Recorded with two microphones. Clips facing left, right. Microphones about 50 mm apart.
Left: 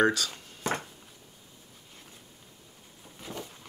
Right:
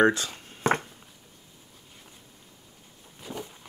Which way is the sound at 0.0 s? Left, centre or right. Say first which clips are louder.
Right 3 dB; right.